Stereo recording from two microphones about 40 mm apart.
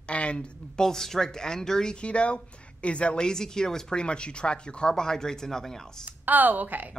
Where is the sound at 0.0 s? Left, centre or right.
Left.